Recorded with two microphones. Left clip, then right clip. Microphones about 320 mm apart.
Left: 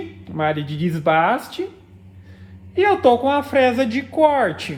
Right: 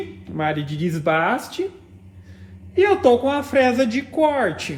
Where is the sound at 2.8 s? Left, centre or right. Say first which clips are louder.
Even; left.